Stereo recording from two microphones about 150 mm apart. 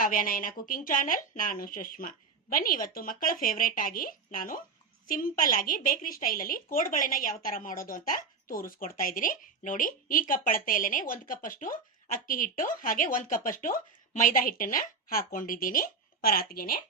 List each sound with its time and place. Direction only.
0.0 s speech: 65° left (ahead or behind)